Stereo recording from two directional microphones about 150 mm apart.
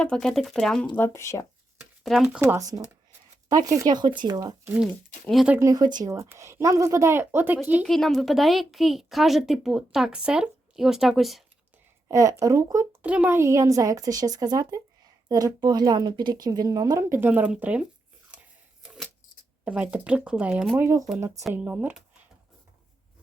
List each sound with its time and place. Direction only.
0.0 s speech: 5° left (ahead or behind)
0.9 s speech: 15° left (ahead or behind)
2.0 s speech: 5° right (ahead or behind)
2.4 s a woman's voice: 20° right (ahead or behind)
4.6 s speech: 10° right (ahead or behind)
5.3 s speech: centre (ahead or behind)
5.5 s a woman's voice: 25° right (ahead or behind)
7.9 s speech: centre (ahead or behind)
12.0 s a woman's voice: 20° right (ahead or behind)
18.8 s keys jangling: 5° left (ahead or behind)
19.6 s speech: 10° right (ahead or behind)